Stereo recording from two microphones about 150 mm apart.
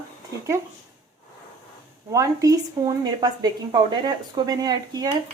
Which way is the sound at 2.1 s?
20° right (ahead or behind).